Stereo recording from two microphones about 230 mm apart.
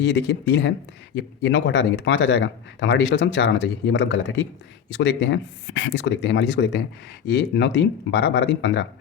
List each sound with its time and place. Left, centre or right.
0.0 s speech: left